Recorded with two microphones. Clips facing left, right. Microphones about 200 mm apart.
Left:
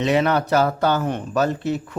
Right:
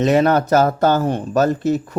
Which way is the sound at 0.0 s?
45° right (ahead or behind).